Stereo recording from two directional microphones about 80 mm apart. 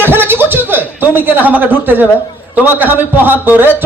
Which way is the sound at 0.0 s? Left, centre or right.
Right.